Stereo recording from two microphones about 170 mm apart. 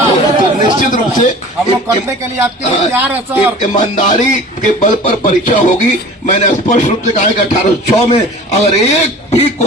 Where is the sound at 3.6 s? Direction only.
45° left (ahead or behind).